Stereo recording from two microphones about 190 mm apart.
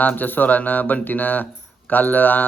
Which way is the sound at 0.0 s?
10° left (ahead or behind).